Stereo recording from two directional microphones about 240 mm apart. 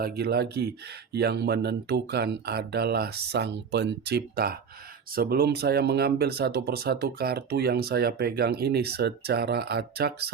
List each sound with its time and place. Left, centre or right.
0.0 s speech: right